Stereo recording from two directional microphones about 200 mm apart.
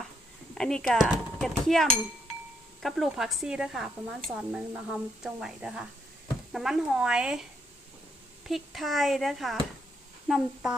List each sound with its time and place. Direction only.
0.5 s speech: 5° left (ahead or behind)
8.4 s speech: centre (ahead or behind)